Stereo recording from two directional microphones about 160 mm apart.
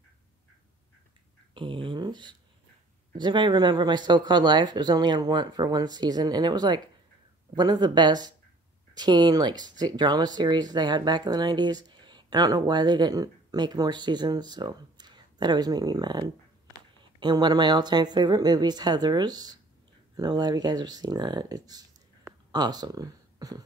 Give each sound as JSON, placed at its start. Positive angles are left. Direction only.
{"t": 1.5, "sound": "speech", "side_deg": -30}